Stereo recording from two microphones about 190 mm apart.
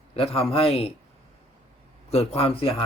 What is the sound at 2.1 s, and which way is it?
Speech, 30° left (ahead or behind).